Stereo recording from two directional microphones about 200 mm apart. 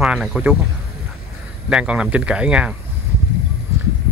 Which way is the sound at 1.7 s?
5° right (ahead or behind).